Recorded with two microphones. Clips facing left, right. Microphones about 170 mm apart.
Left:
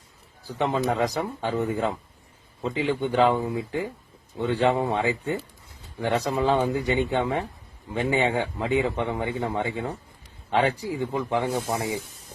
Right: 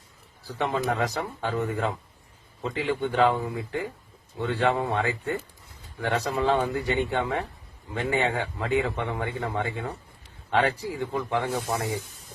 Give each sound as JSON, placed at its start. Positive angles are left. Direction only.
{"t": 0.4, "sound": "speech", "side_deg": 20}